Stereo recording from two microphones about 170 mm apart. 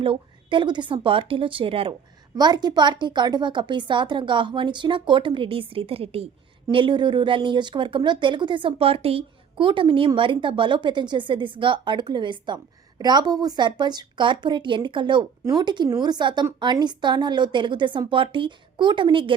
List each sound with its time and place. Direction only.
0.0 s a woman's voice: 30° right (ahead or behind)